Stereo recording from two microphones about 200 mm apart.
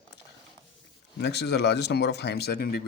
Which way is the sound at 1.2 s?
55° left (ahead or behind).